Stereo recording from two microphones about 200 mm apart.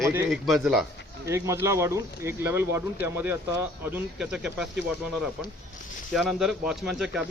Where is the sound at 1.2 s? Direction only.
15° right (ahead or behind).